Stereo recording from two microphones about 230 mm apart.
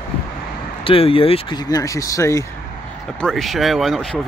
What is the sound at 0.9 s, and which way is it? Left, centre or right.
Speech, left.